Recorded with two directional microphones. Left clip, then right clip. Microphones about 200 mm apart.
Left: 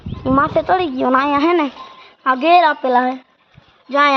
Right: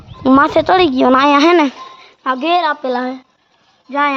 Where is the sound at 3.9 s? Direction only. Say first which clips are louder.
Left 2 dB; 40° left (ahead or behind).